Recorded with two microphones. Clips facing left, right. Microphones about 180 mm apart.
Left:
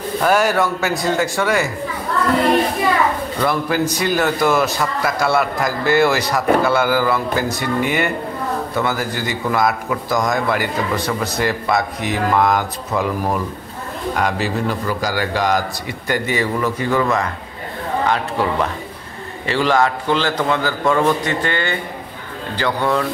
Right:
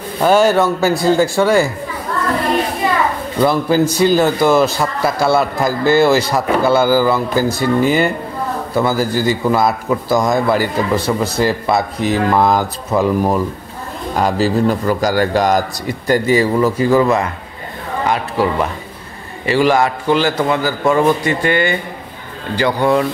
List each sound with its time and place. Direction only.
0.2 s a man's voice: 25° right (ahead or behind)
3.4 s a man's voice: 30° right (ahead or behind)
18.0 s a man's voice: 10° right (ahead or behind)